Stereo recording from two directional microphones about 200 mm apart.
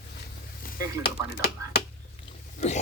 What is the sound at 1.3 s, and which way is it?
Speech, 55° left (ahead or behind).